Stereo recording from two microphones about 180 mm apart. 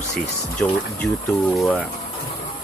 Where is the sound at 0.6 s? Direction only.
10° left (ahead or behind).